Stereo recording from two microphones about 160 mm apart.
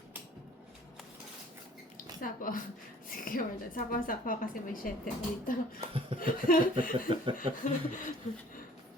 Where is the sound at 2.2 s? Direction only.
55° left (ahead or behind).